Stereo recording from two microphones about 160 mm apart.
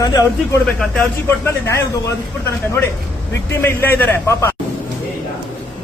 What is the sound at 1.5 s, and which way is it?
Speech, 15° left (ahead or behind).